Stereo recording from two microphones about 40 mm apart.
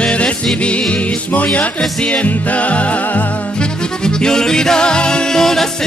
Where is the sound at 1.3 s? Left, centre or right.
Left.